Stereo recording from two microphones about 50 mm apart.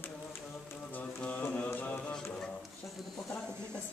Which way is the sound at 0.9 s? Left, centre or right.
Left.